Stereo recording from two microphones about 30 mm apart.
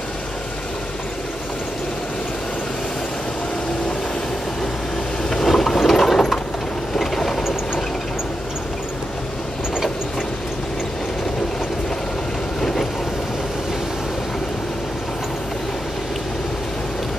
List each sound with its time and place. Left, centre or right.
5.3 s ratchet: centre
6.1 s vehicle: centre
12.5 s vehicle: centre